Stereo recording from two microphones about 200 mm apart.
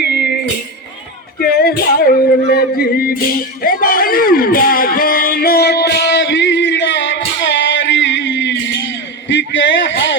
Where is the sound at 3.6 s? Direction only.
45° left (ahead or behind); by 6.9 s 65° left (ahead or behind).